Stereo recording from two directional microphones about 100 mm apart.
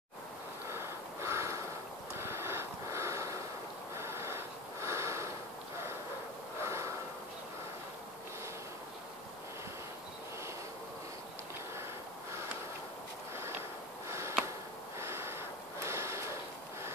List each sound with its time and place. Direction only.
0.7 s gasp: 25° right (ahead or behind)
2.1 s vehicle: 25° right (ahead or behind)
3.9 s a sound: 25° right (ahead or behind)
6.6 s snort: 30° right (ahead or behind)
14.0 s sniff: 30° right (ahead or behind)
15.0 s snort: 25° right (ahead or behind)